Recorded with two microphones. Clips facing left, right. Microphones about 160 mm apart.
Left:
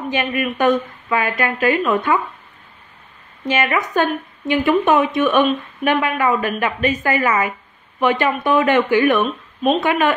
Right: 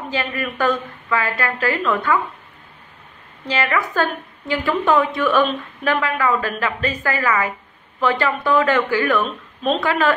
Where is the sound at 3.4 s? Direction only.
20° left (ahead or behind).